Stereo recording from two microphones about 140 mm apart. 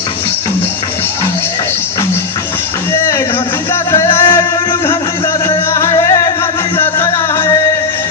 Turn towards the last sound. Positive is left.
turn(degrees=25)  # may be behind; listen again after turning